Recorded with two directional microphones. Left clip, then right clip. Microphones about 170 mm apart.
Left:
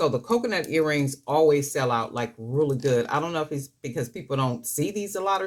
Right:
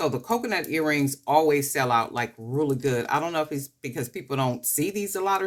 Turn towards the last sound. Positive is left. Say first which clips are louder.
# even
turn(degrees=-40)  # may be behind; listen again after turning